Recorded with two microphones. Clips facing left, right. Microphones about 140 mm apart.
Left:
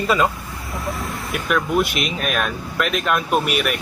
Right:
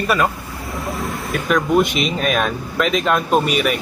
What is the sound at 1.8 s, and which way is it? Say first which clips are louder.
Speech: right 4 dB; centre (ahead or behind).